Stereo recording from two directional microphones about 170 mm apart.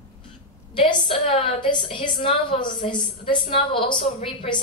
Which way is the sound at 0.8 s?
30° left (ahead or behind).